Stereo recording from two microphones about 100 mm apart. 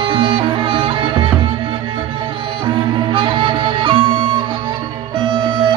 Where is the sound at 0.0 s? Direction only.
60° right (ahead or behind).